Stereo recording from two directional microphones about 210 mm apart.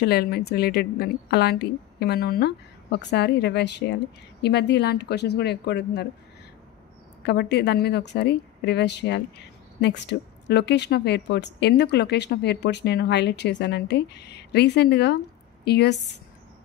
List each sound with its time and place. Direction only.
0.0 s a woman's voice: 50° left (ahead or behind)
7.2 s a woman's voice: 55° left (ahead or behind)